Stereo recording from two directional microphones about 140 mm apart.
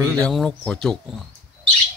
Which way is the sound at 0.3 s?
5° left (ahead or behind).